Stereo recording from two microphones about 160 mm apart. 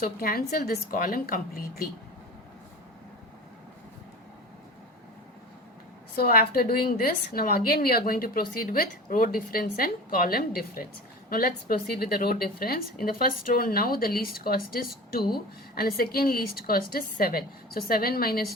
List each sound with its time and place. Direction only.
0.0 s a woman's voice: 65° left (ahead or behind)
6.1 s a woman's voice: 70° left (ahead or behind)